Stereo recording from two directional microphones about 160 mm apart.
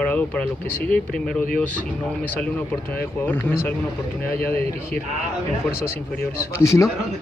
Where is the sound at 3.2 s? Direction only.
15° left (ahead or behind).